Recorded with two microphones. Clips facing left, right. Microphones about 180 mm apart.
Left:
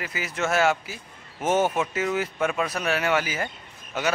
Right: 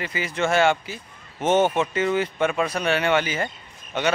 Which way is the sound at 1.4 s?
25° right (ahead or behind).